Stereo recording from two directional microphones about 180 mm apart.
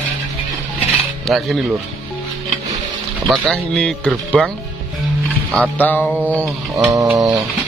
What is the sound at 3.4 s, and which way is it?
A man's voice, 5° left (ahead or behind).